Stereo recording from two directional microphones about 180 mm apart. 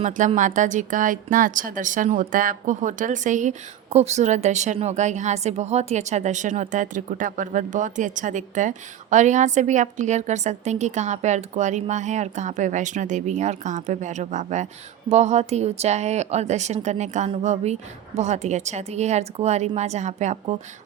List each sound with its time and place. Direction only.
0.0 s speech: 40° right (ahead or behind)